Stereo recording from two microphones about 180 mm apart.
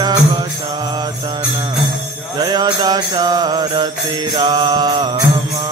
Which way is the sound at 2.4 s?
20° right (ahead or behind).